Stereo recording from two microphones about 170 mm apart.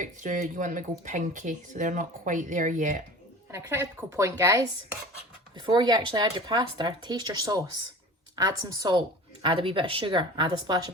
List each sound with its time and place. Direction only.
0.0 s speech: 50° right (ahead or behind)
3.5 s a woman's voice: 15° right (ahead or behind)